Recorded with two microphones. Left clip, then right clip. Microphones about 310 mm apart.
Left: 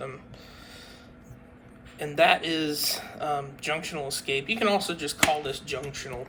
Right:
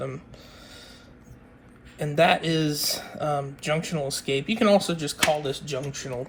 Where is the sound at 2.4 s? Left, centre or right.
Centre.